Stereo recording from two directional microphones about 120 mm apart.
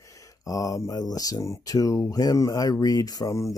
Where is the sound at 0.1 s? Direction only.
30° left (ahead or behind).